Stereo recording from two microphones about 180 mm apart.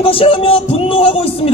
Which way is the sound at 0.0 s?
30° left (ahead or behind).